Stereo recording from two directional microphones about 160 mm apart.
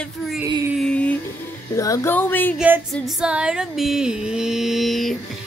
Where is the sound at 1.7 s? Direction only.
20° left (ahead or behind).